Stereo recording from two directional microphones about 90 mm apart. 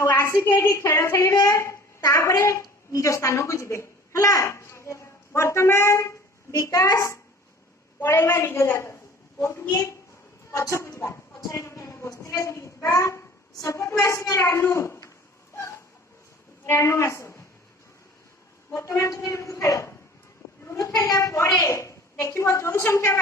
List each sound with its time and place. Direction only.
0.0 s a woman's voice: 30° left (ahead or behind)
16.6 s a woman's voice: 30° left (ahead or behind)
18.7 s a woman's voice: 35° left (ahead or behind)